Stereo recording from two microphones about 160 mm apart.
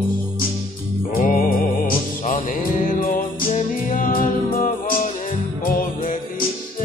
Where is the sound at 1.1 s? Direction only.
60° left (ahead or behind).